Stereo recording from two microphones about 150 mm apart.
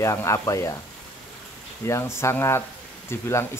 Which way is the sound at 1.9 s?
20° left (ahead or behind).